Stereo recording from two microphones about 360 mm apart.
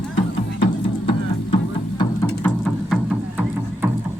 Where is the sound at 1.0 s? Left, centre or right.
Centre.